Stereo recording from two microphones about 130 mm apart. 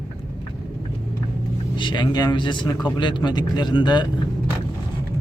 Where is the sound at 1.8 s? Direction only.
35° left (ahead or behind).